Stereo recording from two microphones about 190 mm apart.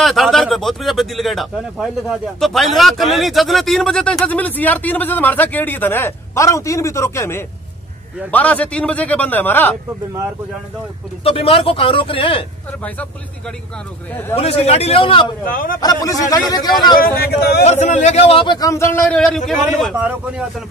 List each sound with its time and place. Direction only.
0.0 s a man's voice: centre (ahead or behind)
11.2 s a man's voice: 30° left (ahead or behind)
14.3 s a man's voice: 30° left (ahead or behind)
15.4 s a man's voice: 50° left (ahead or behind)
15.8 s a man's voice: 20° left (ahead or behind)
17.0 s speech: 50° left (ahead or behind)
17.6 s a man's voice: 35° left (ahead or behind); by 20.6 s 5° right (ahead or behind)